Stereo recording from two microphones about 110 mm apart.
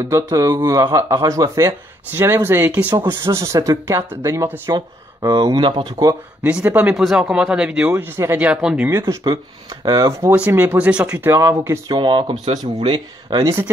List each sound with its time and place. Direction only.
0.0 s speech: 30° right (ahead or behind)
4.7 s speech: 40° right (ahead or behind)
6.6 s speech: 15° right (ahead or behind)
6.9 s speech: 5° right (ahead or behind)
7.9 s speech: 20° right (ahead or behind)
9.2 s speech: 40° right (ahead or behind)
10.3 s speech: 15° right (ahead or behind)
11.9 s speech: 45° right (ahead or behind)
12.9 s speech: 35° right (ahead or behind)